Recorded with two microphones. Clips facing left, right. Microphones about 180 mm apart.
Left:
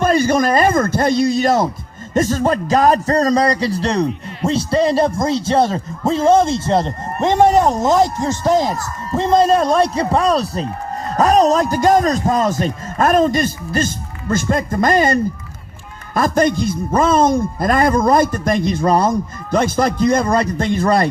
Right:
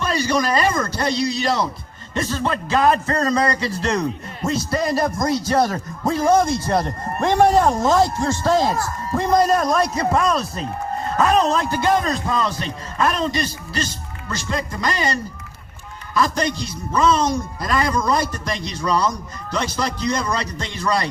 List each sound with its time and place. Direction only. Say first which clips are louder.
0.0 s a man's voice: left 6 dB; 50° left (ahead or behind)